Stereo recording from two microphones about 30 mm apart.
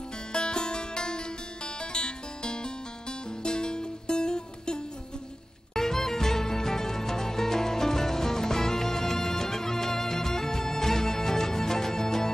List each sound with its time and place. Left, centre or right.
0.3 s music: left
5.8 s music: centre